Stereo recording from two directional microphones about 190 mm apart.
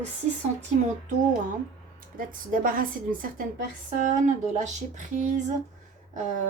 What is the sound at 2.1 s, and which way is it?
A woman's voice, 45° right (ahead or behind).